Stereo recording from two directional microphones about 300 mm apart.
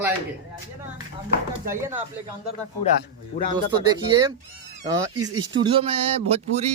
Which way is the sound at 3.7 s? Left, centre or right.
Centre.